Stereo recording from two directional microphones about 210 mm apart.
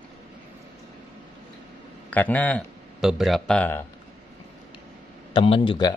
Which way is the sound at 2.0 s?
5° left (ahead or behind).